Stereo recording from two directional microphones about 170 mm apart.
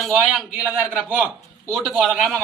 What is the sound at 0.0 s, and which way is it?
Speech, centre (ahead or behind).